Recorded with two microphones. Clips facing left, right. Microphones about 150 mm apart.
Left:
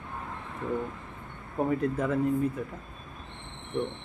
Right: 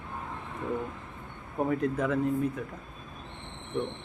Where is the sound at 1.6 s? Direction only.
Centre (ahead or behind).